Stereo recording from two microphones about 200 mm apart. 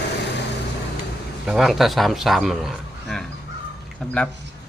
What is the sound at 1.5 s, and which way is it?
A man's voice, centre (ahead or behind).